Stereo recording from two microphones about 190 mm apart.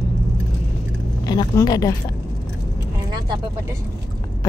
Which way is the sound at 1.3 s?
20° left (ahead or behind).